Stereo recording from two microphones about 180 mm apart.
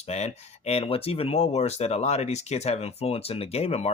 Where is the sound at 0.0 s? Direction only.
35° left (ahead or behind).